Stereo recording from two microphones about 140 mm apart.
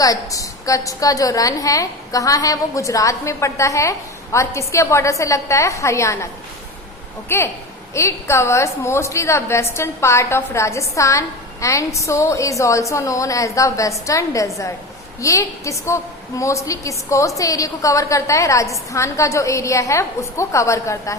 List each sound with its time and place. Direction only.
0.0 s a woman's voice: 25° left (ahead or behind)
7.3 s a woman's voice: 20° left (ahead or behind)